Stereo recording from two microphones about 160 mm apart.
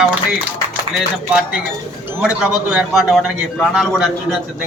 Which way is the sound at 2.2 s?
5° right (ahead or behind).